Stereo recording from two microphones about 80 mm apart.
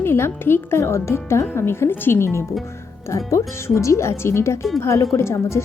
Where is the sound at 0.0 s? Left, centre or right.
Left.